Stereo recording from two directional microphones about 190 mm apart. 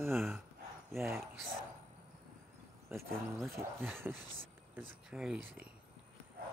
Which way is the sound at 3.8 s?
10° right (ahead or behind).